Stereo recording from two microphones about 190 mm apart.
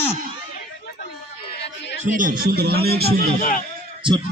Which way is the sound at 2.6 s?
55° right (ahead or behind).